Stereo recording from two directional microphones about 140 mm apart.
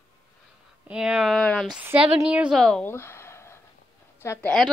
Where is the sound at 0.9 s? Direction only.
5° right (ahead or behind).